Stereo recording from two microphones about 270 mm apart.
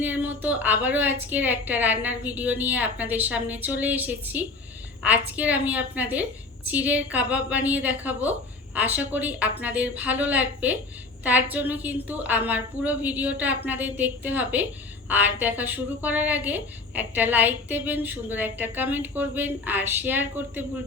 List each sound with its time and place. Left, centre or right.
0.0 s a woman's voice: centre